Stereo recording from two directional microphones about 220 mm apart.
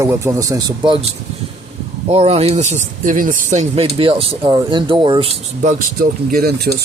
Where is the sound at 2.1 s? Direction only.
30° right (ahead or behind); by 6.7 s 45° right (ahead or behind).